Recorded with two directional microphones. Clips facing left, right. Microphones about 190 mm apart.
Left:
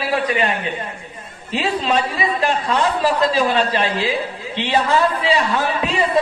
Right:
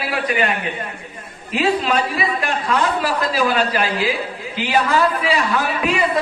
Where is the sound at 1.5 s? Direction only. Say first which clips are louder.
Right 1 dB; 30° left (ahead or behind).